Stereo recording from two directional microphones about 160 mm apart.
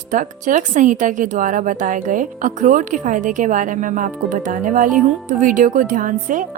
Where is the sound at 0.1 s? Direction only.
55° right (ahead or behind).